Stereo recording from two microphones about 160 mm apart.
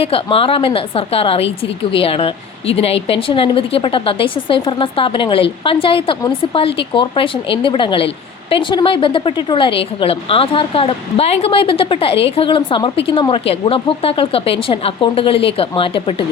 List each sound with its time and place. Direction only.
0.0 s a woman's voice: 35° left (ahead or behind)